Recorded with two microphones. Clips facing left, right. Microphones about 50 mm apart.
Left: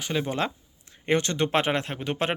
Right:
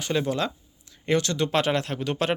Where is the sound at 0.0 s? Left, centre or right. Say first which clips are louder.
Right 2 dB; centre.